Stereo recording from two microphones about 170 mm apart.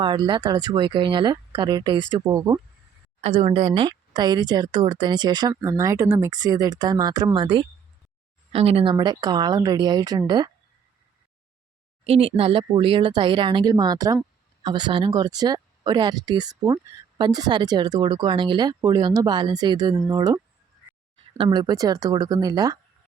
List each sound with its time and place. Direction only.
0.0 s speech: 25° right (ahead or behind)
3.2 s speech: 35° right (ahead or behind)
12.0 s speech: 35° right (ahead or behind)